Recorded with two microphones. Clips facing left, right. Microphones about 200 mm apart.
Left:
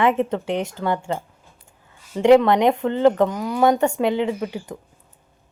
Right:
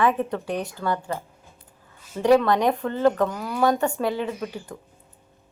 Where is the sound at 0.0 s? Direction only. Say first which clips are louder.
Left 3 dB; 25° left (ahead or behind).